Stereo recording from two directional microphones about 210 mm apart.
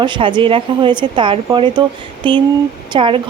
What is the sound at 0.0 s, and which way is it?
A woman's voice, 25° right (ahead or behind).